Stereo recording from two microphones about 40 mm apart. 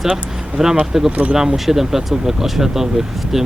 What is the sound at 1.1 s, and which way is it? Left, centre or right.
Speech, right.